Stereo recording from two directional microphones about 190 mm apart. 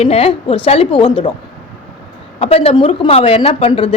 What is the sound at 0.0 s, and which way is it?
A woman's voice, 30° left (ahead or behind).